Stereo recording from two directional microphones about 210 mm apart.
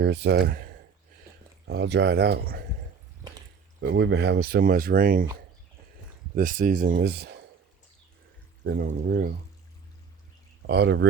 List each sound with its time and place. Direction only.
0.0 s speech: 55° right (ahead or behind)
3.8 s speech: 55° right (ahead or behind)
6.3 s speech: 40° right (ahead or behind)
8.6 s speech: 50° right (ahead or behind)
10.7 s speech: 55° right (ahead or behind)